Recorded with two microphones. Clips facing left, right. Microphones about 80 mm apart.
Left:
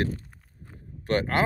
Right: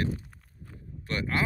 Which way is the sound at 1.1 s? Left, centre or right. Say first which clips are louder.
Left 7 dB; left.